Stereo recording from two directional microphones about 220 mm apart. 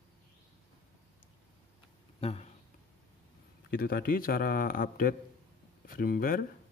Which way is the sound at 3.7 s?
40° left (ahead or behind).